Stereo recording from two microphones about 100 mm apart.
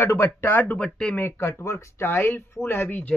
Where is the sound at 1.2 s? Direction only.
25° left (ahead or behind).